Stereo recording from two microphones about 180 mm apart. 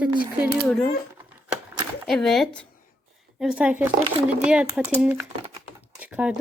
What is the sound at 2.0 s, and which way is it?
A child's voice, centre (ahead or behind).